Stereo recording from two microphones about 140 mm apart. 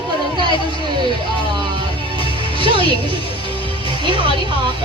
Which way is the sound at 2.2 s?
40° left (ahead or behind).